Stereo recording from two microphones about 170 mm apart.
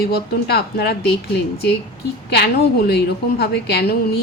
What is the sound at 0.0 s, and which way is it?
Speech, 70° left (ahead or behind).